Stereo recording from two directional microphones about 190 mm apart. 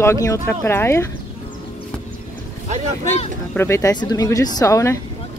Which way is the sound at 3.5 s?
15° left (ahead or behind).